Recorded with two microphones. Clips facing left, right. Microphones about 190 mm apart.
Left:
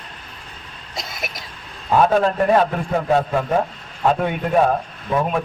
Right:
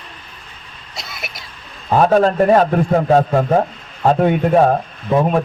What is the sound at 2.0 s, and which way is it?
A man's voice, 40° right (ahead or behind).